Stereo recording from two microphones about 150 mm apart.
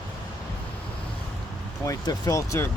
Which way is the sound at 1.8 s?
25° left (ahead or behind).